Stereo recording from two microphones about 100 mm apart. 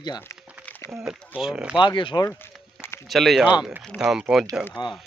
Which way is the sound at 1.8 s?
55° left (ahead or behind).